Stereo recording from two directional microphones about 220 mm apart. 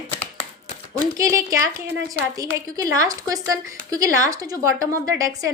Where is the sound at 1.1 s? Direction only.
15° right (ahead or behind).